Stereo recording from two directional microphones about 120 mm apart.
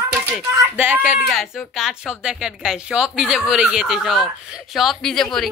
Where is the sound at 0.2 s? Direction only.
15° right (ahead or behind).